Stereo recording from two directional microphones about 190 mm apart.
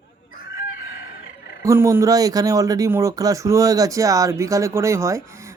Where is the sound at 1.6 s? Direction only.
15° right (ahead or behind).